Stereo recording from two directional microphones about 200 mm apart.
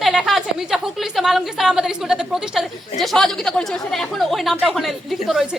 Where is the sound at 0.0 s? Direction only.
Centre (ahead or behind).